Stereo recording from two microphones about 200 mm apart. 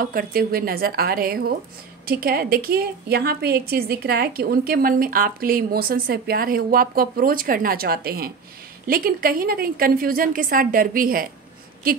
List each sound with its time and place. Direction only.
0.0 s a woman's voice: 45° right (ahead or behind)